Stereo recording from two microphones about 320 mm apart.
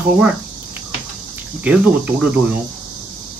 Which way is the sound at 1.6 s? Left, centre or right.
Centre.